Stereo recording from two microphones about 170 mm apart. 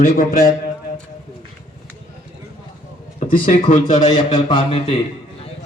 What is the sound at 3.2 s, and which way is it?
Speech, 50° left (ahead or behind).